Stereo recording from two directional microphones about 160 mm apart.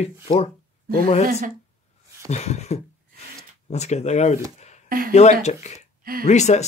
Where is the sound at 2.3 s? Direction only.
45° left (ahead or behind).